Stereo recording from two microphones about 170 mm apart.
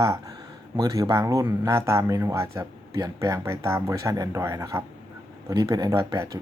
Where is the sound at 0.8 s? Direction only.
20° right (ahead or behind).